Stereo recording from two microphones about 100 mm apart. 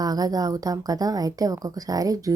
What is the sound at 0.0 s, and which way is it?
A woman's voice, 40° right (ahead or behind).